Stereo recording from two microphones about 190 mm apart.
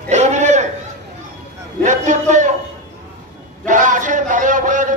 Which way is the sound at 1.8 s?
40° right (ahead or behind).